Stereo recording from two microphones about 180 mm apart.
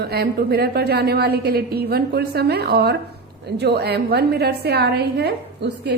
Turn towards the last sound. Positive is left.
turn(degrees=-65)  # may be behind; listen again after turning